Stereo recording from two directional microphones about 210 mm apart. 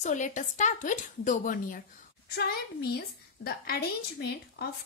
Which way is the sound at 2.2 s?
50° left (ahead or behind).